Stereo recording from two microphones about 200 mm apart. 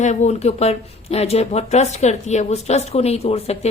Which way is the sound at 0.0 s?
35° left (ahead or behind).